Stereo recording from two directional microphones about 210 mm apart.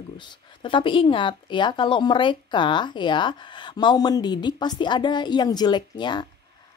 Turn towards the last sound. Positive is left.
turn(degrees=20)  # may be behind; listen again after turning